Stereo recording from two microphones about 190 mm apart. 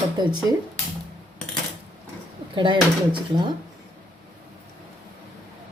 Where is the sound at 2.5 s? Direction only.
25° right (ahead or behind).